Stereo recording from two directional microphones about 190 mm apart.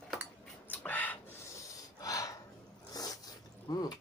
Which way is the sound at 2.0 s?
20° left (ahead or behind).